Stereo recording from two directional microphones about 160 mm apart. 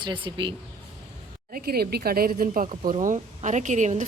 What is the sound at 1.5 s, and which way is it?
A woman's voice, 70° right (ahead or behind).